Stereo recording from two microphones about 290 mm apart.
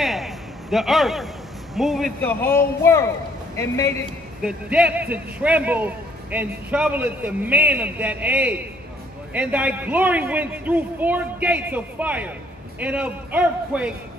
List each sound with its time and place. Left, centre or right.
0.0 s a sound: centre
1.8 s speech: centre
4.4 s a man's voice: centre